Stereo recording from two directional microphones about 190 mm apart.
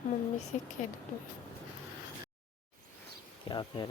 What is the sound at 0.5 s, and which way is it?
Speech, 40° left (ahead or behind).